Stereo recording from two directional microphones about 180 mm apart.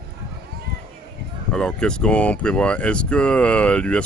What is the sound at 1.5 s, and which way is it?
Speech, 5° left (ahead or behind).